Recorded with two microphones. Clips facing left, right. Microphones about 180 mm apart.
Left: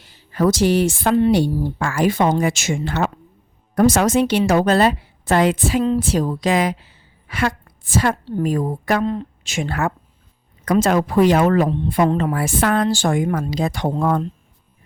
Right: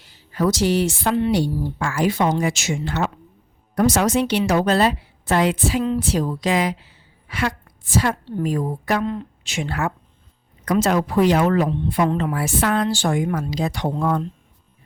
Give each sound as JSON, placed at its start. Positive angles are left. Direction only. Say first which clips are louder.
{"t": 0.1, "sound": "a woman's voice", "louder": "left 3 dB", "side_deg": 50}